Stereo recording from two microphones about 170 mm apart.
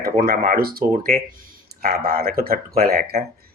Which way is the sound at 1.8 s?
65° right (ahead or behind).